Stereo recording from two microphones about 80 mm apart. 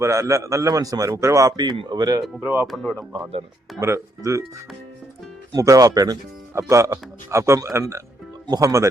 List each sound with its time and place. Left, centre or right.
0.0 s a man's voice: right
1.5 s speech: right
2.4 s a man's voice: right
2.6 s speech: centre
3.8 s a man's voice: right
5.5 s speech: right
6.5 s a man's voice: right